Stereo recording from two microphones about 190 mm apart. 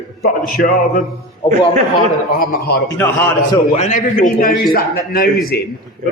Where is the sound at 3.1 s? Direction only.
15° left (ahead or behind).